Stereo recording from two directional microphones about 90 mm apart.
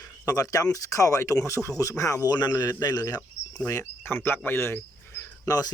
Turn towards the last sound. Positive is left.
turn(degrees=45)  # may be behind; listen again after turning